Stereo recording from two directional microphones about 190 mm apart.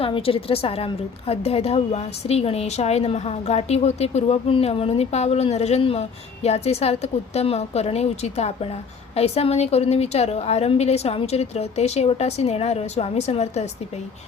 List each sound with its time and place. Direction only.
0.0 s a woman's voice: 30° left (ahead or behind)